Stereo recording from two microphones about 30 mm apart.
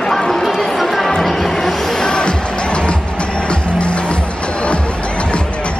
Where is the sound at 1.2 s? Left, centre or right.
Centre.